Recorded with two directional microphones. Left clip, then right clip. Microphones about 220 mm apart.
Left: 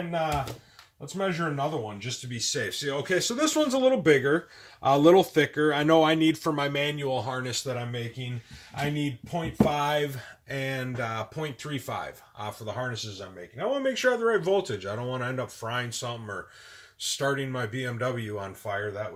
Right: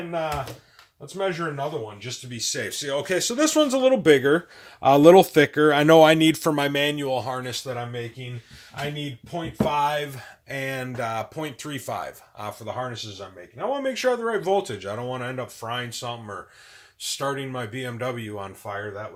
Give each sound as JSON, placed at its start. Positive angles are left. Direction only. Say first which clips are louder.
{"t": 1.2, "sound": "speech", "louder": "right 3 dB", "side_deg": -15}
{"t": 2.0, "sound": "speech", "louder": "right 2 dB", "side_deg": -25}
{"t": 9.0, "sound": "speech", "louder": "even", "side_deg": -15}